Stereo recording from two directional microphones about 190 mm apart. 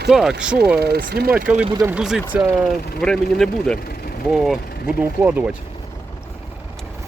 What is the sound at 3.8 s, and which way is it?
Speech, 50° left (ahead or behind).